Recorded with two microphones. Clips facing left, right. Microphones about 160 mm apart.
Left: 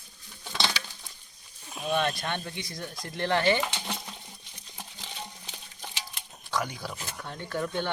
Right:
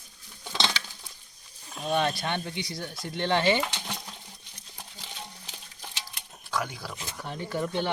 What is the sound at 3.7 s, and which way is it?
Stir, 5° left (ahead or behind).